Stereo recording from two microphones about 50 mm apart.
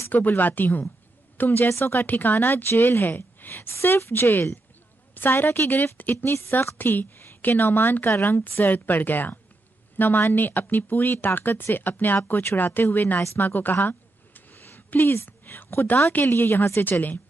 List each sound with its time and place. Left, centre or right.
0.1 s speech: left
1.7 s a woman's voice: left
2.0 s a woman's voice: left
3.8 s a woman's voice: left
13.4 s a sound: left
15.4 s a sound: left
16.1 s a woman's voice: left